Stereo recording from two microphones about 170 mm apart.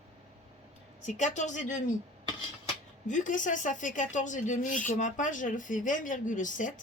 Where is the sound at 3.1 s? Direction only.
50° left (ahead or behind).